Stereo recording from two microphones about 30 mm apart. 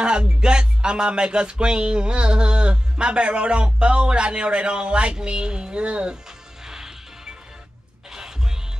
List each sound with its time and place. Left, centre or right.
0.2 s music: right
6.6 s music: centre
8.1 s music: right